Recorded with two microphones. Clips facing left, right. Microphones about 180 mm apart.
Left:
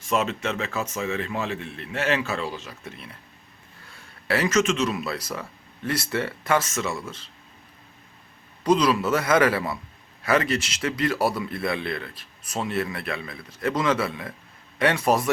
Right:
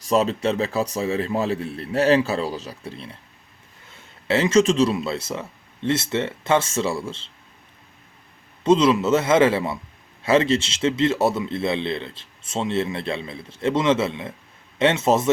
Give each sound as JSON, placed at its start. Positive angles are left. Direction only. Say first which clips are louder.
{"t": 0.0, "sound": "a man's voice", "louder": "right 5 dB", "side_deg": -35}
{"t": 8.6, "sound": "speech", "louder": "right 4 dB", "side_deg": -25}